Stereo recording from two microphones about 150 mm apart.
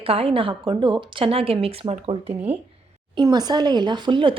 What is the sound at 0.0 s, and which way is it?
A woman's voice, 40° right (ahead or behind).